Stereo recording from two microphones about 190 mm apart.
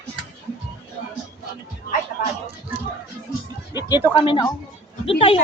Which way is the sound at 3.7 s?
20° left (ahead or behind).